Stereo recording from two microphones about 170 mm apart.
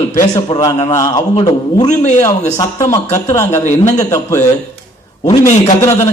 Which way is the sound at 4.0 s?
20° left (ahead or behind).